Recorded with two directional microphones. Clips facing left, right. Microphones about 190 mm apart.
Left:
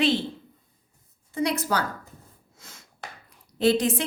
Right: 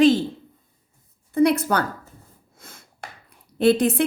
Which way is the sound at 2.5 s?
55° right (ahead or behind).